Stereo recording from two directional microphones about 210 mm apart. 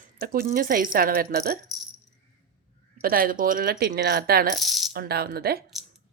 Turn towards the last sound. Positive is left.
turn(degrees=-50)  # may be behind; listen again after turning